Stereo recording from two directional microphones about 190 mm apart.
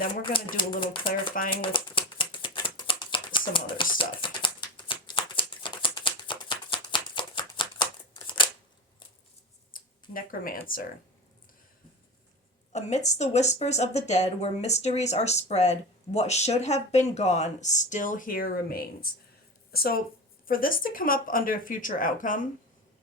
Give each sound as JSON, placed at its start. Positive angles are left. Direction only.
{"t": 0.3, "sound": "speech", "side_deg": 25}
{"t": 1.0, "sound": "speech", "side_deg": 45}
{"t": 1.6, "sound": "a sound", "side_deg": 25}
{"t": 3.9, "sound": "shuffling cards", "side_deg": 25}
{"t": 9.7, "sound": "a sound", "side_deg": 50}
{"t": 12.7, "sound": "speech", "side_deg": 35}